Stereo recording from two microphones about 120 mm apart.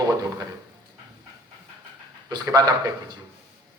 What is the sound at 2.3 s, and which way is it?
Speech, 35° right (ahead or behind).